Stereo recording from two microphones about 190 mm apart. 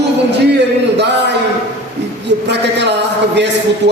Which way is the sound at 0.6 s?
65° right (ahead or behind).